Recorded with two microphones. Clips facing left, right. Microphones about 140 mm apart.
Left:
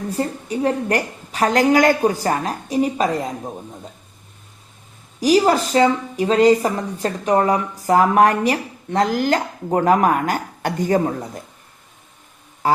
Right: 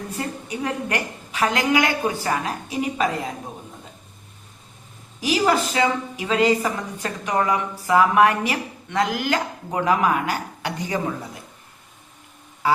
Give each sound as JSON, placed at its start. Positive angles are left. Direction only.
{"t": 0.1, "sound": "a woman's voice", "side_deg": 35}
{"t": 5.2, "sound": "a woman's voice", "side_deg": 35}